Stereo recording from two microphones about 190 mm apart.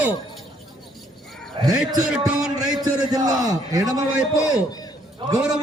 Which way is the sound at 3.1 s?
20° right (ahead or behind).